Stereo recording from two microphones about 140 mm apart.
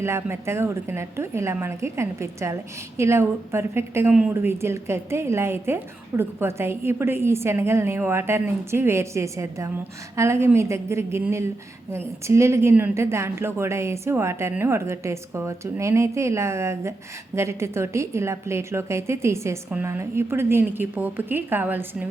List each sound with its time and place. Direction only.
0.0 s a woman's voice: 20° right (ahead or behind)